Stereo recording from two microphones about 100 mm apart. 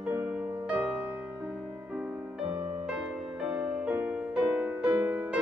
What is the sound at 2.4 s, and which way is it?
Music, 85° right.